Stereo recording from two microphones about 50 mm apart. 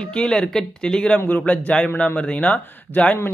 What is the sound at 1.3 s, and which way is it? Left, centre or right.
A man's voice, left.